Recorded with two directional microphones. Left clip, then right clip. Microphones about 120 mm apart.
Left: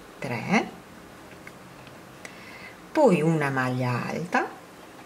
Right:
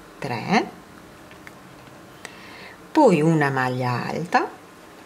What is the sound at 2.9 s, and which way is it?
A woman's voice, 25° right (ahead or behind).